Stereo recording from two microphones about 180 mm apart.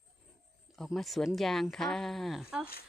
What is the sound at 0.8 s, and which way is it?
Speech, centre (ahead or behind).